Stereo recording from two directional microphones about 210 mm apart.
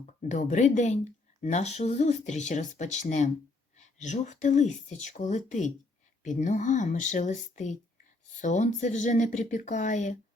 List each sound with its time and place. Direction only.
0.0 s speech: 35° left (ahead or behind)